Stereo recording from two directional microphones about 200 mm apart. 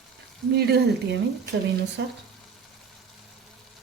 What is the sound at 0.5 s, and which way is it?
Speech, 55° right (ahead or behind).